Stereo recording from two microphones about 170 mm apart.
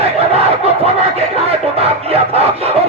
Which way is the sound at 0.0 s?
35° right (ahead or behind).